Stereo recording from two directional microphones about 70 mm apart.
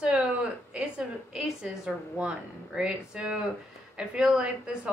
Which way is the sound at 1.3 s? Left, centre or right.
Centre.